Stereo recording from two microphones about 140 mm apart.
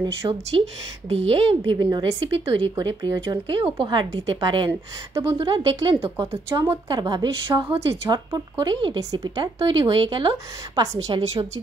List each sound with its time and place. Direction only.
0.3 s speech: 45° right (ahead or behind)
4.6 s speech: 15° right (ahead or behind)
5.4 s speech: 30° right (ahead or behind)
5.9 s a woman's voice: 20° right (ahead or behind)
8.1 s a woman's voice: 30° right (ahead or behind)